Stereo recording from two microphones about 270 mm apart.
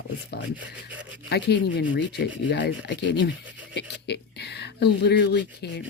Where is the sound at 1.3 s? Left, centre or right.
Left.